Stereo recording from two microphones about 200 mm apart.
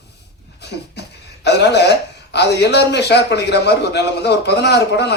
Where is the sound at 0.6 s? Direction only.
55° left (ahead or behind).